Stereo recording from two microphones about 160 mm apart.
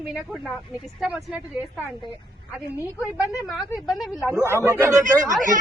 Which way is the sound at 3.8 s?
Centre (ahead or behind).